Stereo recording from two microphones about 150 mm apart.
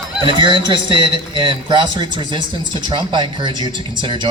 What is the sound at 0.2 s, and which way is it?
A man's voice, 35° right (ahead or behind).